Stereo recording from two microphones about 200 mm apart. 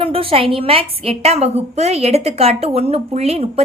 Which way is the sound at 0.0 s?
25° right (ahead or behind).